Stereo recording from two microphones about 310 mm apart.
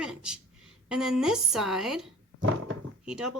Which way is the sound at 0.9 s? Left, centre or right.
Centre.